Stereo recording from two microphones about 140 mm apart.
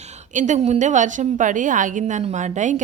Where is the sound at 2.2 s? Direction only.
55° right (ahead or behind).